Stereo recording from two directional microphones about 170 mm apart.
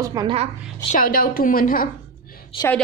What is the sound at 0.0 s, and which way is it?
Speech, 20° right (ahead or behind).